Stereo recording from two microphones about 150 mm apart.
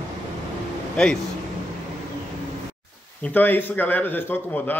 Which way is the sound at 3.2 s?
10° left (ahead or behind).